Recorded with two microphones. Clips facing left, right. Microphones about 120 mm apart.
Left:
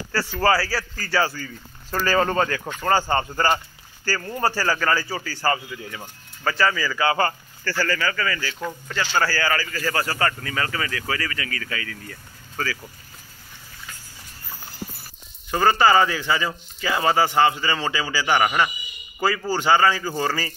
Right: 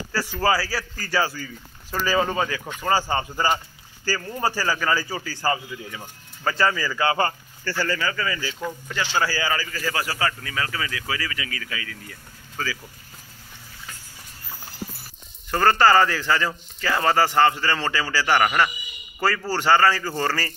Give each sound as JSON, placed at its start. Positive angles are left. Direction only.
{"t": 0.1, "sound": "a man's voice", "side_deg": -10}
{"t": 8.5, "sound": "a man's voice", "side_deg": -5}
{"t": 8.9, "sound": "a man's voice", "side_deg": -20}
{"t": 15.5, "sound": "a man's voice", "side_deg": 5}